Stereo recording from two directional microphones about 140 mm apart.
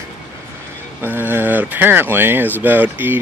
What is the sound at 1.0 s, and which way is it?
Speech, 15° right (ahead or behind).